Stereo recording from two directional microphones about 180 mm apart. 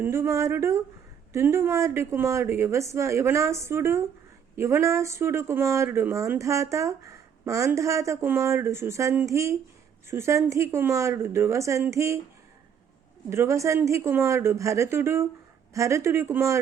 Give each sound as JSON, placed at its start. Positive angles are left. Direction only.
{"t": 0.0, "sound": "speech", "side_deg": -15}
{"t": 13.3, "sound": "speech", "side_deg": -15}